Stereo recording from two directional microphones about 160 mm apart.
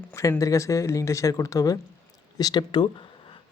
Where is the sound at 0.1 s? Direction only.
20° left (ahead or behind).